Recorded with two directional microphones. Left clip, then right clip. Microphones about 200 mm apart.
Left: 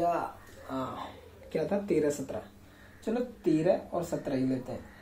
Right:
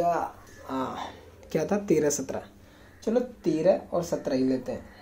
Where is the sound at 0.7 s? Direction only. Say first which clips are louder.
Right 4 dB; 55° right (ahead or behind).